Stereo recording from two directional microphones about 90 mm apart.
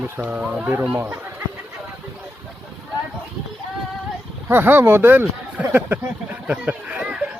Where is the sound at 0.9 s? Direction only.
25° right (ahead or behind).